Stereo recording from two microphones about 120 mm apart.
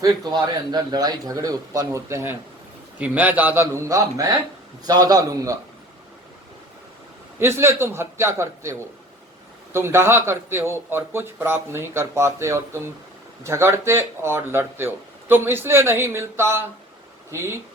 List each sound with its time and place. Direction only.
0.0 s speech: 30° right (ahead or behind)
3.0 s a man's voice: 15° right (ahead or behind); by 5.5 s 30° right (ahead or behind)
7.3 s speech: 20° right (ahead or behind)
9.7 s speech: 20° right (ahead or behind)